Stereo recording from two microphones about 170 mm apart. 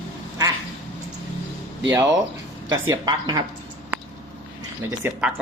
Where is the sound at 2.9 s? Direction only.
25° right (ahead or behind).